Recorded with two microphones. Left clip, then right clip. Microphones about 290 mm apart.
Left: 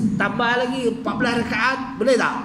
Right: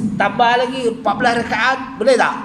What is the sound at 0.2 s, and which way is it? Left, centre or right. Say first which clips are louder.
A man's voice: right 7 dB; centre.